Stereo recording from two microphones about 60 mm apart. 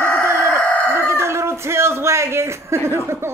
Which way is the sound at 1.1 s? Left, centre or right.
Right.